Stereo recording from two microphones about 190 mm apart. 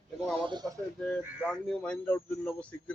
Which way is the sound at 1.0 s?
5° left (ahead or behind).